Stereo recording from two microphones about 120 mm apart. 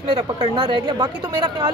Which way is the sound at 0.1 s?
45° right (ahead or behind).